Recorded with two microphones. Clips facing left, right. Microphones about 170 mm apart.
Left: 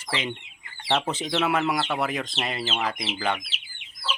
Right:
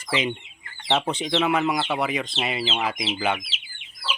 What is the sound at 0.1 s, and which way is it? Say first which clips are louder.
Speech: right 5 dB; 15° right (ahead or behind).